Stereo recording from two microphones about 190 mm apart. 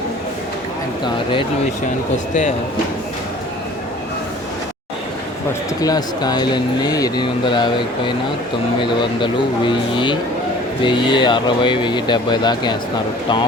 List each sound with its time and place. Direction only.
1.0 s speech: 25° left (ahead or behind)
5.8 s speech: 20° left (ahead or behind)